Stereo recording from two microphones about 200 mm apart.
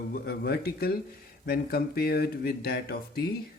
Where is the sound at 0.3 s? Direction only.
50° left (ahead or behind).